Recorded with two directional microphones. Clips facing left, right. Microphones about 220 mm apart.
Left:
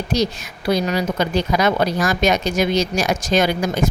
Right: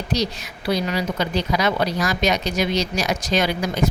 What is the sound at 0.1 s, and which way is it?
Speech, 50° left (ahead or behind).